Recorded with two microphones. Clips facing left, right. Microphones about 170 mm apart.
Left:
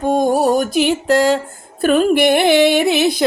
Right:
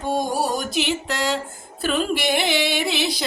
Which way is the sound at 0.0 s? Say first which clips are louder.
Left 8 dB; 50° left (ahead or behind).